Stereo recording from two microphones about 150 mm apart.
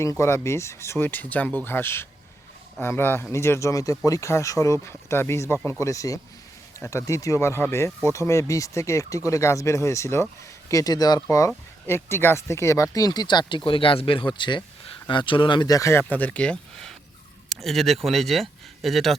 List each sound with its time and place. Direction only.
0.0 s speech: 20° left (ahead or behind); by 19.1 s centre (ahead or behind)